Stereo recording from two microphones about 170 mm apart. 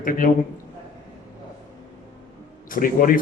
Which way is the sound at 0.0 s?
55° left (ahead or behind).